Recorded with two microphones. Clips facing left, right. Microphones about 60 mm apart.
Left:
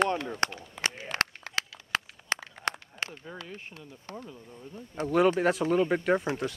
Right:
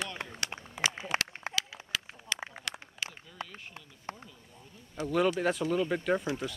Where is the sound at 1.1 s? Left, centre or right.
Right.